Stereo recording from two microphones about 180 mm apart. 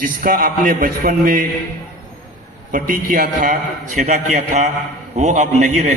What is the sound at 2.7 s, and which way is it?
A man's voice, 50° right (ahead or behind).